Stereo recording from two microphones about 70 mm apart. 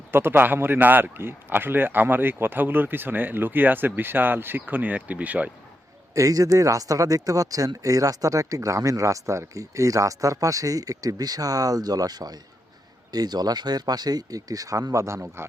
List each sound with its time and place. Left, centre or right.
0.1 s a man's voice: right
6.1 s speech: right